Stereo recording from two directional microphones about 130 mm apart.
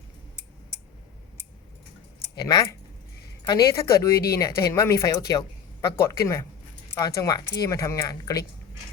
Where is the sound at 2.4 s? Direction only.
30° left (ahead or behind).